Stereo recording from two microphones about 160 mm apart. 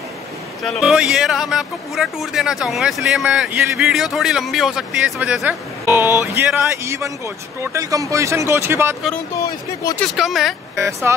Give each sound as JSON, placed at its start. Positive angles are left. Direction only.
{"t": 0.7, "sound": "speech", "side_deg": 0}
{"t": 9.9, "sound": "speech", "side_deg": 0}
{"t": 11.1, "sound": "speech", "side_deg": -15}